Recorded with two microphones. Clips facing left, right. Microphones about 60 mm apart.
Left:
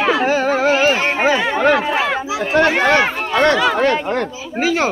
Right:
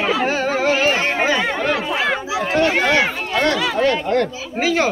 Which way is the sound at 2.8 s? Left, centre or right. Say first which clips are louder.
Left 3 dB; left.